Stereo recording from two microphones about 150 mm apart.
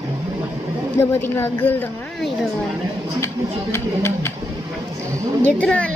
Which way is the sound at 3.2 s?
15° left (ahead or behind).